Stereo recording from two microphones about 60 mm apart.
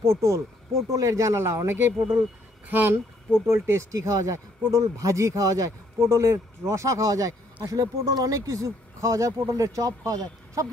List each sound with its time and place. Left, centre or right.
0.0 s speech: right
0.8 s speech: right
1.7 s speech: right
3.4 s speech: right
5.9 s speech: right